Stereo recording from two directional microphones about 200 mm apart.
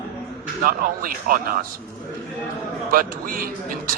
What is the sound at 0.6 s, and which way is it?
Speech, 45° right (ahead or behind).